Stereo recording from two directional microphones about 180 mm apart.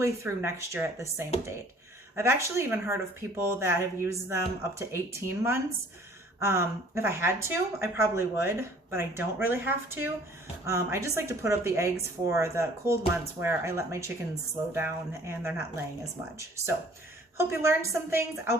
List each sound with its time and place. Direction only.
0.0 s speech: 15° right (ahead or behind)